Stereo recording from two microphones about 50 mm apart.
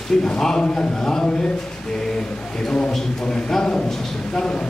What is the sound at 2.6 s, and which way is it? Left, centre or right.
A man's voice, centre.